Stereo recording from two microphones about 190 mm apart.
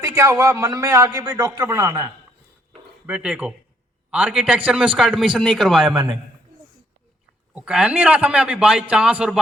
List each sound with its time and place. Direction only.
0.0 s a man's voice: 15° right (ahead or behind)
3.1 s a man's voice: 5° right (ahead or behind)
5.9 s a man's voice: 20° right (ahead or behind)
7.5 s a man's voice: 5° right (ahead or behind)